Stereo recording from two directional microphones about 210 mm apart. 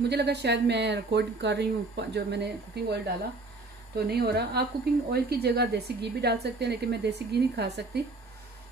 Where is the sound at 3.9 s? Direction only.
50° right (ahead or behind).